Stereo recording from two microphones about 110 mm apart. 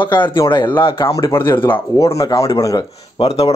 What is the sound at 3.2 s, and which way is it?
Speech, 65° left (ahead or behind).